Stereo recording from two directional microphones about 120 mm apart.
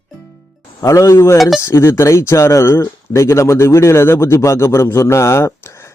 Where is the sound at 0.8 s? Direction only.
25° left (ahead or behind).